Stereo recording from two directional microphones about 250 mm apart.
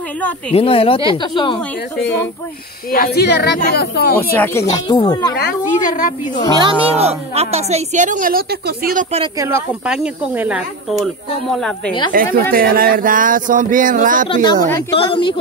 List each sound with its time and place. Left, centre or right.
0.5 s speech: left
2.9 s speech: left
4.2 s speech: centre
5.4 s speech: left
6.6 s a woman's voice: right
9.1 s a woman's voice: right
9.8 s speech: centre
12.1 s speech: right
14.3 s speech: centre